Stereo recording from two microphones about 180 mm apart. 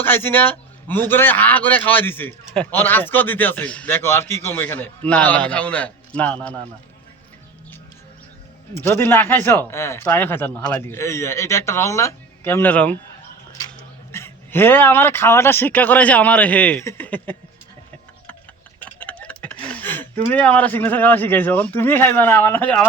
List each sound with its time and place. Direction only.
0.0 s speech: 10° left (ahead or behind)
8.7 s speech: 15° left (ahead or behind)
14.1 s speech: 15° left (ahead or behind)
18.8 s a sound: 5° left (ahead or behind)
20.3 s speech: 10° left (ahead or behind)